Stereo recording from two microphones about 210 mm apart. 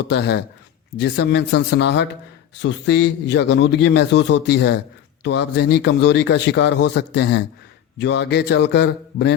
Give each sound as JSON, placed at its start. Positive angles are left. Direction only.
{"t": 0.1, "sound": "a man's voice", "side_deg": 55}